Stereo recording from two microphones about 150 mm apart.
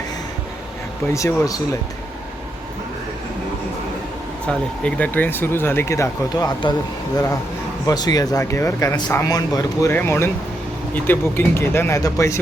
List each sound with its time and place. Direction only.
1.0 s speech: 20° left (ahead or behind)
4.4 s speech: 10° left (ahead or behind); by 6.7 s 30° left (ahead or behind)
7.9 s speech: 25° left (ahead or behind)